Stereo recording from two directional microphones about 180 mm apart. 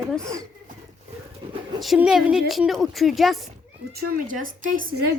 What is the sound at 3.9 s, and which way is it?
A woman's voice, 60° right (ahead or behind).